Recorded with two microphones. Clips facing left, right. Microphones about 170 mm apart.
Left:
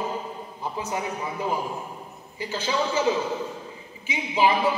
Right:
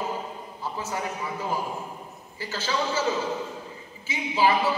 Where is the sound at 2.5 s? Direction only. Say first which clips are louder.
Left 2 dB; 15° left (ahead or behind).